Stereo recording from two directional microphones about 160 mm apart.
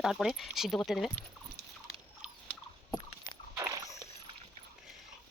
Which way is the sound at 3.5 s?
20° right (ahead or behind).